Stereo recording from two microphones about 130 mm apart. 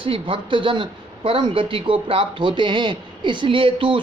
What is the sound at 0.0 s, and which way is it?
Speech, 40° right (ahead or behind).